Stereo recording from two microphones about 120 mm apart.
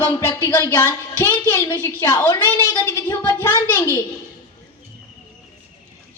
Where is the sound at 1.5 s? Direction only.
30° left (ahead or behind).